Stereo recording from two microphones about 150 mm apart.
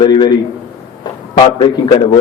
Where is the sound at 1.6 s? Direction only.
35° left (ahead or behind).